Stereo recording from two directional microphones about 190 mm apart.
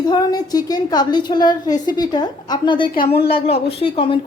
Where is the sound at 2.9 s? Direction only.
55° left (ahead or behind).